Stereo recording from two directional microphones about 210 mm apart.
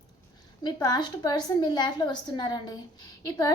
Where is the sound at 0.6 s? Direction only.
20° left (ahead or behind).